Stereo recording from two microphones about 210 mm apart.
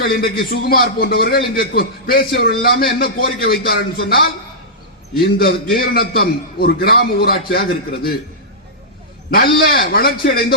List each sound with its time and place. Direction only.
0.0 s a man's voice: 45° left (ahead or behind)
9.3 s a man's voice: 45° left (ahead or behind)